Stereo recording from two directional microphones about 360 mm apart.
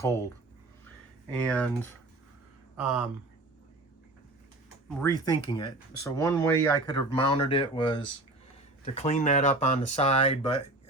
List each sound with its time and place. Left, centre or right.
1.5 s speech: centre
4.9 s speech: centre